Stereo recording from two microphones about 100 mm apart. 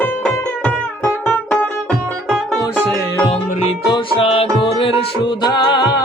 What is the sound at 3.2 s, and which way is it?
Music, 75° left (ahead or behind).